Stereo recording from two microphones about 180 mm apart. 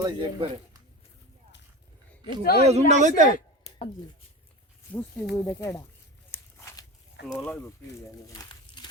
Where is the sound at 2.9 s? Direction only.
40° right (ahead or behind).